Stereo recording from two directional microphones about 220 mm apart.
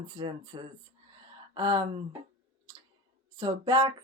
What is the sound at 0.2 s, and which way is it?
Speech, 20° right (ahead or behind).